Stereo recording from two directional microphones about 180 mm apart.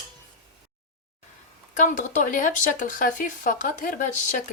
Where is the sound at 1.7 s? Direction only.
45° left (ahead or behind).